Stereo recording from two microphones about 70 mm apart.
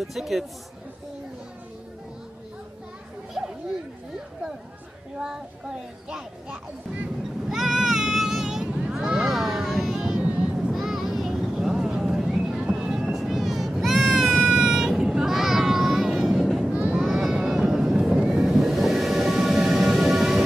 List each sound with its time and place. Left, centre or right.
0.0 s speech: centre
3.4 s children playing: centre
5.2 s speech: centre
7.4 s a sound: centre
10.2 s a sound: centre
10.7 s vehicle: centre
13.7 s sheep: centre
16.7 s vehicle: centre
17.0 s vehicle: centre